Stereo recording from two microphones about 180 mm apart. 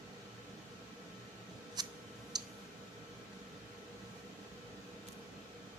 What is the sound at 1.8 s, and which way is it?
Scissors, 20° right (ahead or behind).